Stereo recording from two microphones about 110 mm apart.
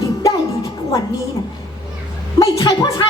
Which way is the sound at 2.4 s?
30° left (ahead or behind).